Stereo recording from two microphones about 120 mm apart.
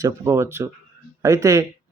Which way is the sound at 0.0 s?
25° right (ahead or behind).